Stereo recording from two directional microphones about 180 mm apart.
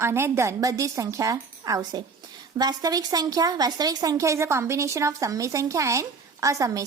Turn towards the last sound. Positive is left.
turn(degrees=-20)  # may be behind; listen again after turning